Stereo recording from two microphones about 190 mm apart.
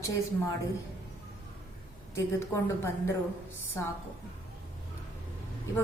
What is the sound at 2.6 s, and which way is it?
A woman's voice, 15° left (ahead or behind).